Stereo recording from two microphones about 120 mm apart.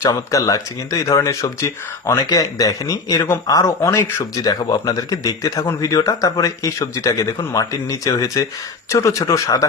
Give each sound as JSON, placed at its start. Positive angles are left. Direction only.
{"t": 0.0, "sound": "speech", "side_deg": 30}